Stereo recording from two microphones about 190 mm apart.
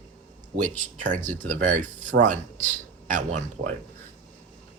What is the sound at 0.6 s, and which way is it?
Speech, 45° right (ahead or behind).